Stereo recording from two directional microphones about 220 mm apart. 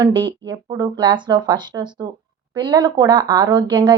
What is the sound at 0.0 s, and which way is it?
A woman's voice, 20° right (ahead or behind).